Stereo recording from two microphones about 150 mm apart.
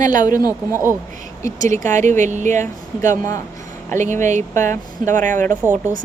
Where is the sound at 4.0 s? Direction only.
55° right (ahead or behind).